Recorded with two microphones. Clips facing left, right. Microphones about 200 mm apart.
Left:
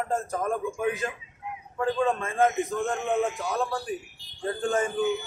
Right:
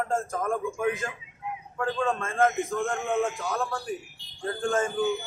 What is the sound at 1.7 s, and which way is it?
A man's voice, 20° left (ahead or behind).